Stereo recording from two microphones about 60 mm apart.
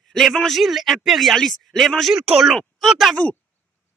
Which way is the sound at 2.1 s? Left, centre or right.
Centre.